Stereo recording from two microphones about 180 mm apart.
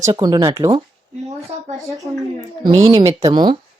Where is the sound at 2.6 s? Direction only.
35° right (ahead or behind).